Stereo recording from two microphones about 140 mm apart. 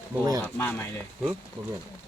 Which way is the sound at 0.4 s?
10° left (ahead or behind).